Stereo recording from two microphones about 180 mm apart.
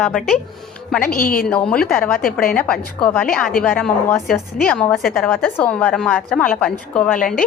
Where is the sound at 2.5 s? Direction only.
5° left (ahead or behind).